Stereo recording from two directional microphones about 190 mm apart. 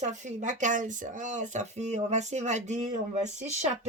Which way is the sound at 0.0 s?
40° right (ahead or behind).